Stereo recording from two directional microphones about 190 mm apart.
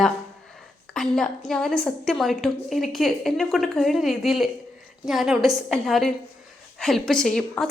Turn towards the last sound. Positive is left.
turn(degrees=5)  # may be behind; listen again after turning